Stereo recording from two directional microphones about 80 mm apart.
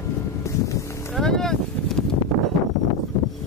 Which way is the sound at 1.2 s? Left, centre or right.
Centre.